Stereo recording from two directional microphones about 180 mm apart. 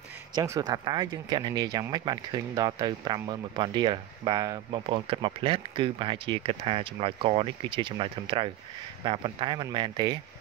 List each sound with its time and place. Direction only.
0.3 s speech: 20° right (ahead or behind)